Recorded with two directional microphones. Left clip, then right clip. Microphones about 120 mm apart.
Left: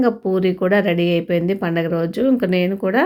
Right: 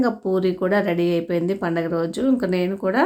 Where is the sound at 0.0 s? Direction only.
20° left (ahead or behind).